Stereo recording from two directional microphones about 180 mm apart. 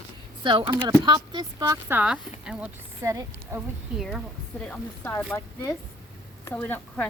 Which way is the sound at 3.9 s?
5° right (ahead or behind).